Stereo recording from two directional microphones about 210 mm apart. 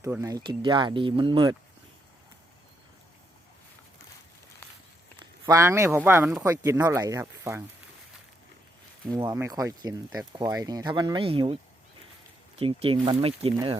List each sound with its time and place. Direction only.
0.0 s speech: 15° right (ahead or behind)
5.2 s speech: 15° right (ahead or behind)
9.1 s speech: 15° right (ahead or behind)
12.5 s speech: 25° right (ahead or behind)